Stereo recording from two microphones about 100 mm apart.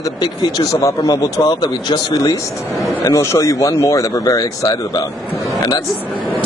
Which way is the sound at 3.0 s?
30° left (ahead or behind).